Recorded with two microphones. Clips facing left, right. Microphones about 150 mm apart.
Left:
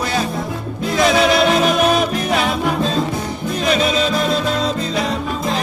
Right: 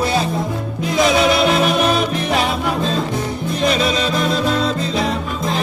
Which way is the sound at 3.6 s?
35° right (ahead or behind).